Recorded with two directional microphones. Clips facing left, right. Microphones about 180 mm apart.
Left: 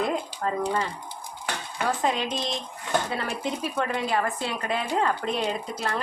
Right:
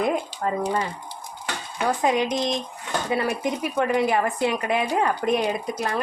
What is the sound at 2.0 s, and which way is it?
A woman's voice, 15° right (ahead or behind).